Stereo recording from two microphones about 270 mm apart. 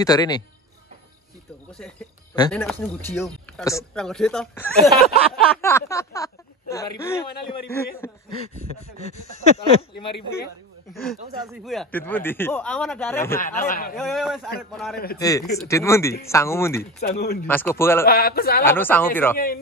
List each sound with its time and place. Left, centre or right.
0.0 s speech: centre
2.5 s speech: centre
4.9 s a man's voice: left
5.6 s speech: centre
8.9 s speech: left
11.5 s speech: centre
13.4 s a man's voice: left
13.9 s speech: centre
15.1 s speech: centre
17.0 s a man's voice: left
17.5 s speech: centre
18.0 s a man's voice: left
18.7 s speech: centre
19.3 s a man's voice: left